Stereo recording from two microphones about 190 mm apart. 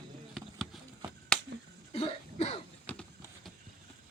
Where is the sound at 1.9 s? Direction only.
30° left (ahead or behind).